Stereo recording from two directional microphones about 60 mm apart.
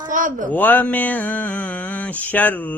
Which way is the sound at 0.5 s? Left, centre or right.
Left.